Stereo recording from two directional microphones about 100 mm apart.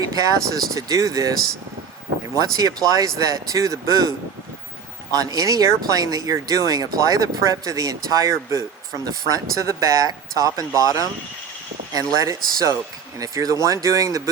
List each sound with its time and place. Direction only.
0.1 s speech: 35° right (ahead or behind)
5.1 s speech: 40° right (ahead or behind)
12.1 s speech: 35° right (ahead or behind)